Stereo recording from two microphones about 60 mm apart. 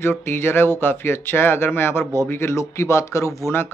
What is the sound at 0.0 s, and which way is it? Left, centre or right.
Speech, left.